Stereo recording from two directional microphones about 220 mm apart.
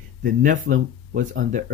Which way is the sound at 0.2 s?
35° right (ahead or behind).